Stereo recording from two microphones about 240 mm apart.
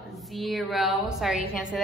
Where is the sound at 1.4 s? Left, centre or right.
Left.